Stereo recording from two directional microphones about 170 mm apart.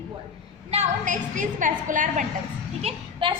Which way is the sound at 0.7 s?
45° right (ahead or behind).